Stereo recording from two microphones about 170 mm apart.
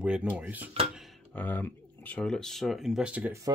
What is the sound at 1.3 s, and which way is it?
Speech, 10° left (ahead or behind).